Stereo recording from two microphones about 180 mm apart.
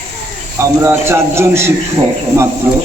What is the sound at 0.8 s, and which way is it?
Speech, 15° right (ahead or behind).